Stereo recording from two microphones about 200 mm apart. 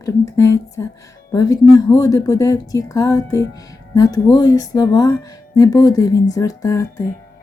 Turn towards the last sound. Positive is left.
turn(degrees=15)  # may be behind; listen again after turning